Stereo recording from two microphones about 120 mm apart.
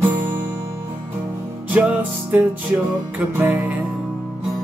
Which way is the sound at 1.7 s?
15° right (ahead or behind).